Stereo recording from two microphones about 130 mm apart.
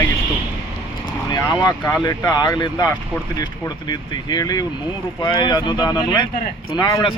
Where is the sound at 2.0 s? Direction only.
30° left (ahead or behind).